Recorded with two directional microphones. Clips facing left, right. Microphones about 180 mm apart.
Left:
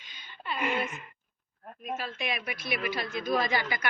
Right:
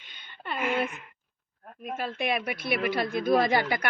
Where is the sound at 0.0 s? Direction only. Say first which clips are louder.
Right 1 dB; 60° right (ahead or behind).